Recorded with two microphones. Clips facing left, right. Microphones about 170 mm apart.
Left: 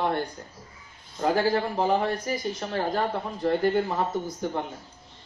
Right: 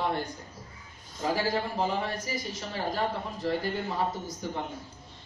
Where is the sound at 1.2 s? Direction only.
55° left (ahead or behind).